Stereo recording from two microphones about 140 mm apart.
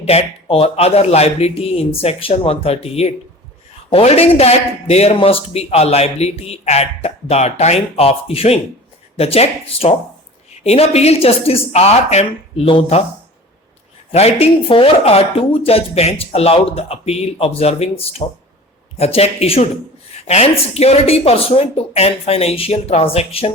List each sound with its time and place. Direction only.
0.0 s speech: 45° left (ahead or behind)
14.1 s speech: 50° left (ahead or behind)